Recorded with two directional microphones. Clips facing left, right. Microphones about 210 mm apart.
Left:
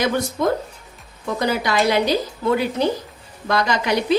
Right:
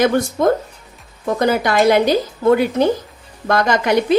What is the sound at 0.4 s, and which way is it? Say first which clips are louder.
A woman's voice: right 5 dB; 50° right (ahead or behind).